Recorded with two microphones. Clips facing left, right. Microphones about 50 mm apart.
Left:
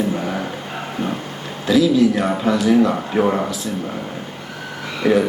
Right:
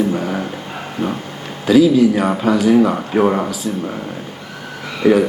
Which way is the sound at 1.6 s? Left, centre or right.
Centre.